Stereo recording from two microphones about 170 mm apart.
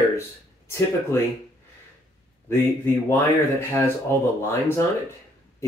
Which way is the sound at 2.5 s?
15° left (ahead or behind).